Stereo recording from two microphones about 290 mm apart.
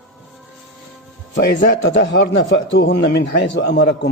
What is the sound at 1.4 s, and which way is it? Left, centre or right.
A man's voice, left.